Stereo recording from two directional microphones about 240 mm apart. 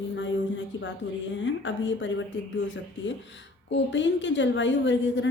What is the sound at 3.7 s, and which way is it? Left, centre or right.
Speech, left.